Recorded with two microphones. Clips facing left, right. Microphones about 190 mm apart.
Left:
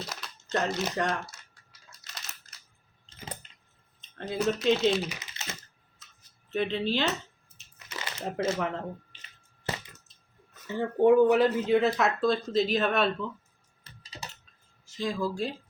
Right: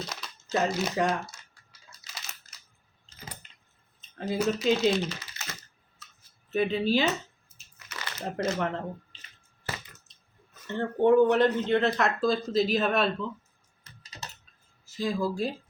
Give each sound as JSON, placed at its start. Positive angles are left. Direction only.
{"t": 0.0, "sound": "speech", "side_deg": 0}
{"t": 2.0, "sound": "a sound", "side_deg": 0}
{"t": 4.0, "sound": "speech", "side_deg": -5}
{"t": 5.0, "sound": "speech", "side_deg": 15}
{"t": 6.5, "sound": "speech", "side_deg": -5}
{"t": 7.9, "sound": "crumpling", "side_deg": 25}
{"t": 8.2, "sound": "speech", "side_deg": 0}
{"t": 10.1, "sound": "speech", "side_deg": 5}
{"t": 13.9, "sound": "typing", "side_deg": 30}
{"t": 14.8, "sound": "speech", "side_deg": -5}